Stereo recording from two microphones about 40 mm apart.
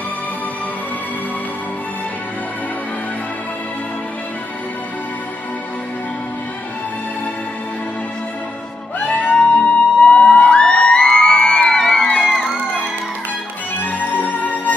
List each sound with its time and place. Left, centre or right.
9.0 s music: left
9.6 s music: left
13.7 s music: left